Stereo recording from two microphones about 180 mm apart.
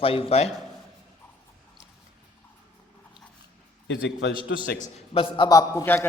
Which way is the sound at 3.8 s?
90° left.